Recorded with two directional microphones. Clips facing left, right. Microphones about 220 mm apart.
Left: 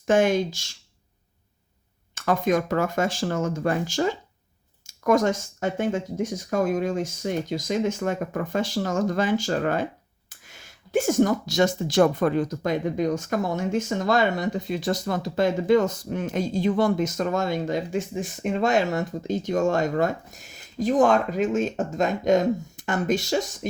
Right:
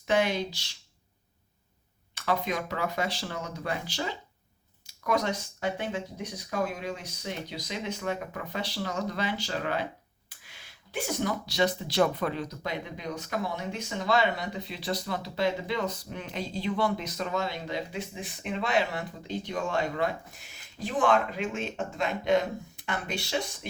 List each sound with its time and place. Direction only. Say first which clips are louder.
0.1 s speech: left 7 dB; 45° left (ahead or behind)
2.1 s speech: left 8 dB; 45° left (ahead or behind)